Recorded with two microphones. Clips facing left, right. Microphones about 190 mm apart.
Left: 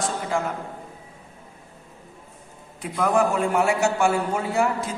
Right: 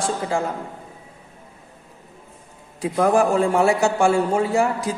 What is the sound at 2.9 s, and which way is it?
A man's voice, 30° right (ahead or behind).